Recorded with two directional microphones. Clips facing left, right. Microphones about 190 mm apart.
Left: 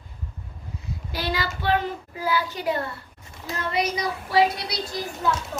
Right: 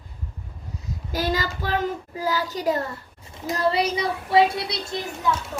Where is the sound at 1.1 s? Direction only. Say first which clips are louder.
Right 3 dB; 45° right (ahead or behind).